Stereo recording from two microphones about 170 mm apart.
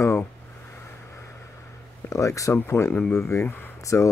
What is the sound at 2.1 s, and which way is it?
Speech, 20° left (ahead or behind).